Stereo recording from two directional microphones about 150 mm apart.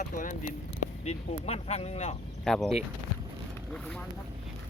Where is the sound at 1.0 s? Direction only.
45° left (ahead or behind).